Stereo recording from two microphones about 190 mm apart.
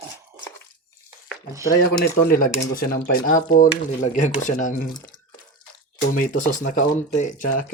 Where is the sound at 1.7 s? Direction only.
50° left (ahead or behind).